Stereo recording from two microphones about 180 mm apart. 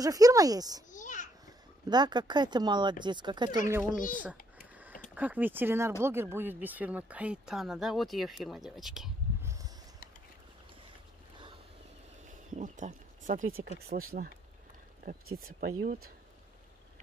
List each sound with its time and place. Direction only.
0.0 s speech: 20° right (ahead or behind)
0.9 s children playing: 45° left (ahead or behind)
1.9 s speech: 25° right (ahead or behind)
3.8 s a child's voice: 50° left (ahead or behind)
5.1 s speech: 10° right (ahead or behind)
9.4 s a sound: 15° right (ahead or behind)
12.5 s speech: 45° right (ahead or behind)
13.7 s speech: 55° right (ahead or behind)